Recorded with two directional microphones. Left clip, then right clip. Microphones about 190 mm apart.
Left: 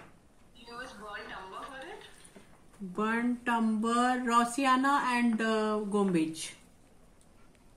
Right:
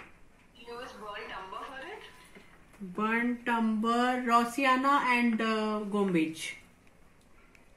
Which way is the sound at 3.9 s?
Centre (ahead or behind).